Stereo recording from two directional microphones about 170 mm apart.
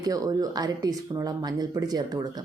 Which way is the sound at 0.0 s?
20° right (ahead or behind).